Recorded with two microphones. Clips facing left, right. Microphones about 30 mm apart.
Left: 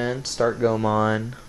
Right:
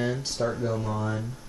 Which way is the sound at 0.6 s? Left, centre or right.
Left.